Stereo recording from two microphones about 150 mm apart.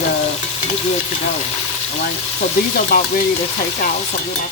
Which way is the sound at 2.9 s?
90° left.